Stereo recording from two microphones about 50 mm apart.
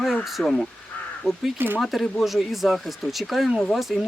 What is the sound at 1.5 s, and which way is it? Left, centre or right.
Speech, right.